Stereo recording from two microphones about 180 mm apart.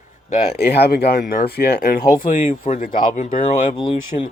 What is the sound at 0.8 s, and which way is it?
Speech, 60° left (ahead or behind).